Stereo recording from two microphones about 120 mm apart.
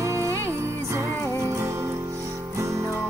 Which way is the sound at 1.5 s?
25° right (ahead or behind).